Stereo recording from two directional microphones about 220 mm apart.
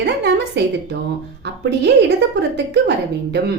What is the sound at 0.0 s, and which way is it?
Speech, 50° right (ahead or behind).